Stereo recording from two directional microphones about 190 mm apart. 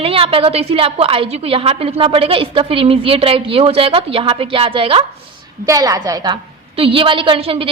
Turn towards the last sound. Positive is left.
turn(degrees=-30)  # may be behind; listen again after turning